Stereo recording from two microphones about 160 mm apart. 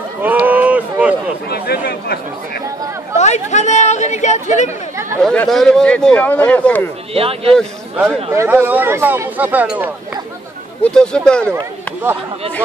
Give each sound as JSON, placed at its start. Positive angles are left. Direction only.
{"t": 0.2, "sound": "a sound", "side_deg": -10}
{"t": 1.5, "sound": "chatter", "side_deg": 80}
{"t": 3.2, "sound": "chatter", "side_deg": 45}
{"t": 5.2, "sound": "speech", "side_deg": 5}
{"t": 7.2, "sound": "speech", "side_deg": -35}
{"t": 8.3, "sound": "speech", "side_deg": -15}
{"t": 10.8, "sound": "speech", "side_deg": 5}